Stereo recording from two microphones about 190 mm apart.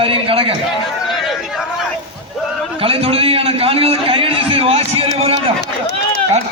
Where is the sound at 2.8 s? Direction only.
30° right (ahead or behind).